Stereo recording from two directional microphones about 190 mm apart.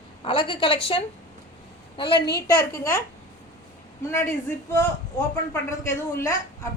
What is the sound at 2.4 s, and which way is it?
Speech, 15° left (ahead or behind).